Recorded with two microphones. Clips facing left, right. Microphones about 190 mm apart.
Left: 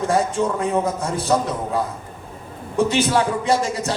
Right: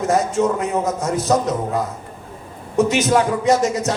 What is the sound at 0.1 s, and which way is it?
A man's voice, 30° left (ahead or behind).